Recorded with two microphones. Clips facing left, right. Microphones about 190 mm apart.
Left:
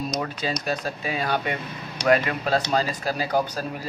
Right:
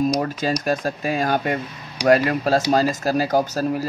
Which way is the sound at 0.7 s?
45° right (ahead or behind).